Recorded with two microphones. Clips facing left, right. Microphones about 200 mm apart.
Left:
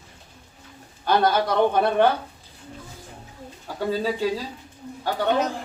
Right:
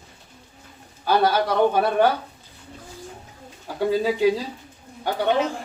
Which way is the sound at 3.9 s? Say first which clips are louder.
Right 3 dB; 15° right (ahead or behind).